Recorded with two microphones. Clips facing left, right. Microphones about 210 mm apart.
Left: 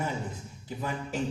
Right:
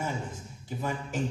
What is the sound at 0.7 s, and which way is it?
Speech, 45° right (ahead or behind).